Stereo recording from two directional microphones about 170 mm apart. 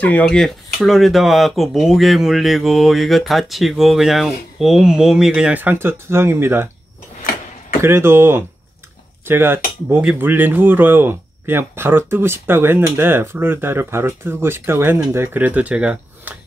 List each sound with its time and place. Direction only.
0.0 s speech: 10° left (ahead or behind); by 6.7 s 15° right (ahead or behind)
7.8 s speech: 15° right (ahead or behind)